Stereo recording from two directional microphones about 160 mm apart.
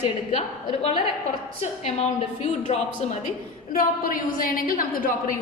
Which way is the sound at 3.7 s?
60° left (ahead or behind).